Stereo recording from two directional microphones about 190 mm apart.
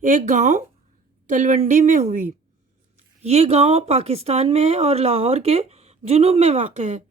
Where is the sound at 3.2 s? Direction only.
35° right (ahead or behind).